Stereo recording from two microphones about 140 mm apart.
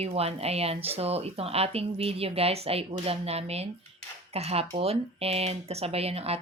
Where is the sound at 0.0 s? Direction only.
45° right (ahead or behind).